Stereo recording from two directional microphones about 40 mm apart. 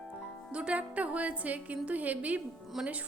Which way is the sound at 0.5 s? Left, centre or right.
Right.